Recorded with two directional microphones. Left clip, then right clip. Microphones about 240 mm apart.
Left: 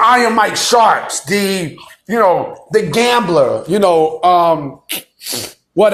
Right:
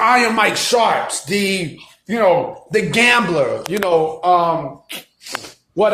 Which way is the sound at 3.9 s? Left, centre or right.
Left.